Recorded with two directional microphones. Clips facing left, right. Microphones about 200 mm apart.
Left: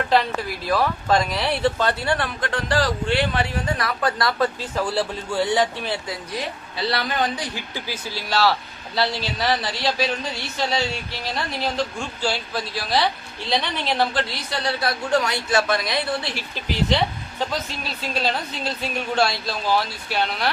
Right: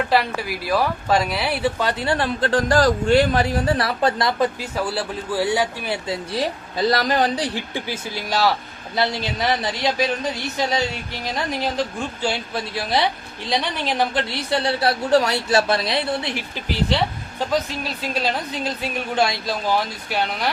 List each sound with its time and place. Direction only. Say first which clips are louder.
0.1 s speech: even; 10° right (ahead or behind)
2.0 s speech: right 4 dB; 25° right (ahead or behind)
4.6 s speech: left 1 dB; 5° right (ahead or behind)
6.1 s speech: right 5 dB; 30° right (ahead or behind)
6.7 s speech: right 5 dB; 45° right (ahead or behind); by 16.6 s 20° right (ahead or behind)
18.0 s speech: even; 10° right (ahead or behind)